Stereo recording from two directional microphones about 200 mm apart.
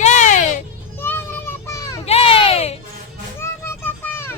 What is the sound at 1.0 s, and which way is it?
Children playing, 10° left (ahead or behind).